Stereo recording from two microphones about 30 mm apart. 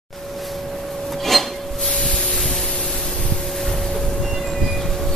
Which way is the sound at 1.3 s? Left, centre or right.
Centre.